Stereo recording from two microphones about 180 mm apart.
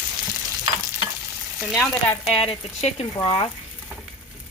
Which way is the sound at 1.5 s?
Centre (ahead or behind).